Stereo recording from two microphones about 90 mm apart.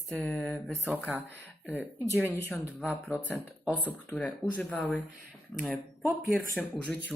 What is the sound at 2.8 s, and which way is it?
Speech, 20° left (ahead or behind).